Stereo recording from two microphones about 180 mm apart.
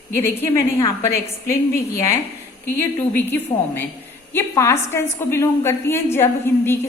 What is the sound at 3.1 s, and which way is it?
A woman's voice, 10° left (ahead or behind).